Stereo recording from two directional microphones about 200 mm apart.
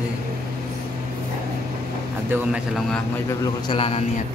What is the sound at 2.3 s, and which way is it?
Speech, 5° right (ahead or behind).